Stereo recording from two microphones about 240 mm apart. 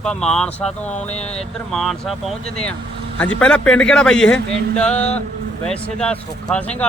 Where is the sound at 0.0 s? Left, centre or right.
Centre.